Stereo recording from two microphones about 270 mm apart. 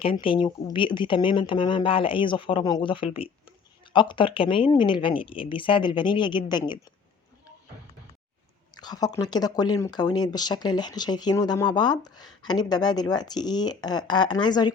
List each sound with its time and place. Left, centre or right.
0.0 s speech: centre
8.7 s speech: centre